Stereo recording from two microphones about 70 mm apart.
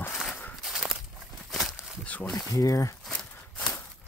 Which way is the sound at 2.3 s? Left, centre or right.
Left.